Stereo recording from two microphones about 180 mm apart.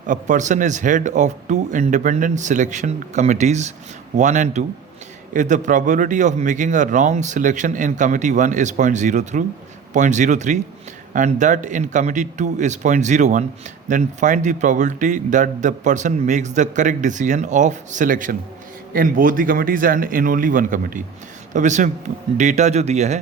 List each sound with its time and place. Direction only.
0.1 s a man's voice: 45° right (ahead or behind)